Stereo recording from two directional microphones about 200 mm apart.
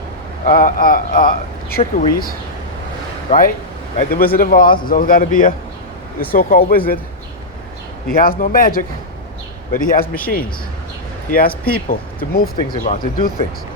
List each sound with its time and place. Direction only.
0.4 s speech: 45° left (ahead or behind)
8.0 s speech: 45° left (ahead or behind)
11.3 s speech: 45° left (ahead or behind)